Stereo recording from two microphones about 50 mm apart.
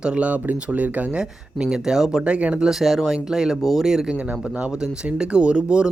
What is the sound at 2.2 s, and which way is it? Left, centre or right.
Speech, right.